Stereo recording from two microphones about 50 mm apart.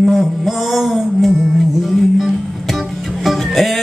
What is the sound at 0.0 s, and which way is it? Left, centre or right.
Music, centre.